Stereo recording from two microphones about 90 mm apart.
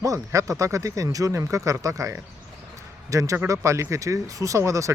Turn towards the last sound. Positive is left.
turn(degrees=-35)  # may be behind; listen again after turning